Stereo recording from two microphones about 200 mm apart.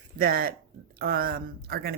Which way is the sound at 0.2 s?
45° right (ahead or behind).